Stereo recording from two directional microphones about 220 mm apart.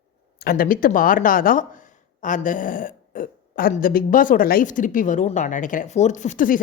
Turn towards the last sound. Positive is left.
turn(degrees=40)  # may be behind; listen again after turning